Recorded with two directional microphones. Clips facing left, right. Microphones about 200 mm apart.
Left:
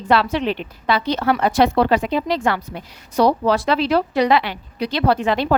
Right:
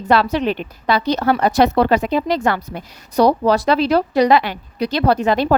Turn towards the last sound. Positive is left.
turn(degrees=-40)  # may be behind; listen again after turning